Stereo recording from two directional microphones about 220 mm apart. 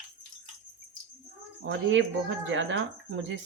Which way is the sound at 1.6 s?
55° right (ahead or behind).